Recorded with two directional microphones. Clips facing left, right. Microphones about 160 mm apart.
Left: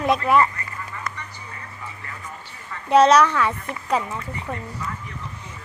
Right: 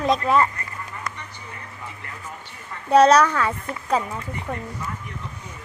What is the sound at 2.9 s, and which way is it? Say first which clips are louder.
A child's voice: even; 35° right (ahead or behind).